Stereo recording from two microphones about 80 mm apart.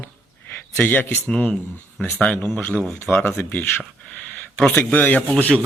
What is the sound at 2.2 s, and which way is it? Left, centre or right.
Speech, centre.